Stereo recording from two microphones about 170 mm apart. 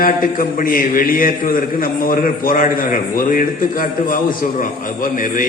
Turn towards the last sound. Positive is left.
turn(degrees=55)  # may be behind; listen again after turning